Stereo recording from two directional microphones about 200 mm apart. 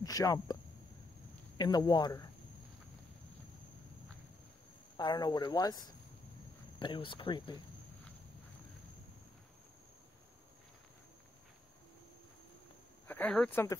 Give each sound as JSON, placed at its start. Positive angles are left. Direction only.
{"t": 0.0, "sound": "speech", "side_deg": 15}
{"t": 1.6, "sound": "speech", "side_deg": 20}
{"t": 4.9, "sound": "speech", "side_deg": 20}
{"t": 6.8, "sound": "speech", "side_deg": 25}
{"t": 13.0, "sound": "speech", "side_deg": 10}